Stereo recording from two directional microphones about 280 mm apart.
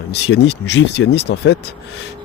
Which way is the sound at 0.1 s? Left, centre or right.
Left.